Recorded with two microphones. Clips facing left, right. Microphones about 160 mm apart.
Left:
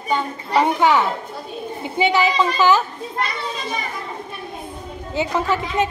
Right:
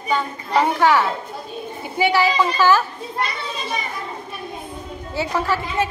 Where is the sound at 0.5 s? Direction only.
15° left (ahead or behind).